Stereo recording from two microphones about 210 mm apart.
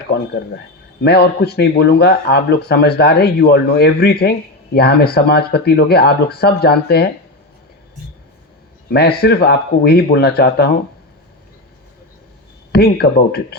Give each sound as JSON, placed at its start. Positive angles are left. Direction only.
{"t": 1.0, "sound": "speech", "side_deg": 50}
{"t": 8.9, "sound": "speech", "side_deg": 50}
{"t": 12.7, "sound": "speech", "side_deg": 50}